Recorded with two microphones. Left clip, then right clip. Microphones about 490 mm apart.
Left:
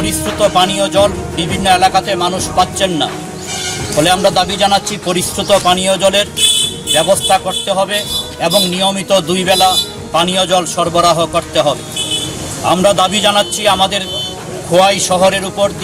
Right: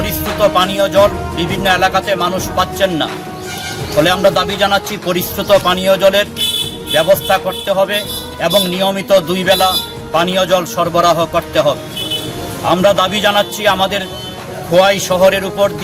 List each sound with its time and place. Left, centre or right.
0.0 s music: right
4.0 s a man's voice: right